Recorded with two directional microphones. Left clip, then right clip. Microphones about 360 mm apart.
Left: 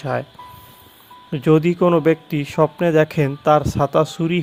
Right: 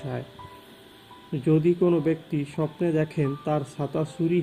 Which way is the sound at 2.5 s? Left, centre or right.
Left.